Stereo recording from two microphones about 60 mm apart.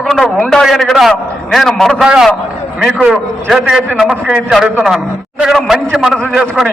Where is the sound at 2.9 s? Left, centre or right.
Right.